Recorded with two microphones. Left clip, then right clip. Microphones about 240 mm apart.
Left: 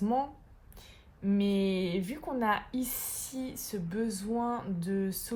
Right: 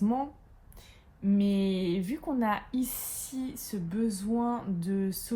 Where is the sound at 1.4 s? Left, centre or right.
Left.